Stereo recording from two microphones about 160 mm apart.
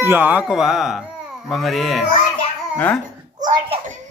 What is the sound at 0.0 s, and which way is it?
A man's voice, 10° right (ahead or behind).